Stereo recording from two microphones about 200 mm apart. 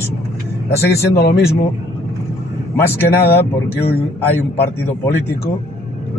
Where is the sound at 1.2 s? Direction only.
50° left (ahead or behind).